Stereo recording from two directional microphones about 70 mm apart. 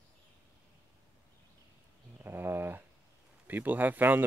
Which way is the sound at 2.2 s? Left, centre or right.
Right.